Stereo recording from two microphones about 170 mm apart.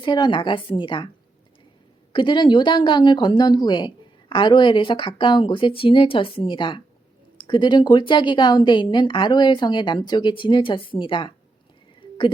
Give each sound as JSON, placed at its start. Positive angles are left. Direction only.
{"t": 0.0, "sound": "speech", "side_deg": 25}
{"t": 2.1, "sound": "speech", "side_deg": 30}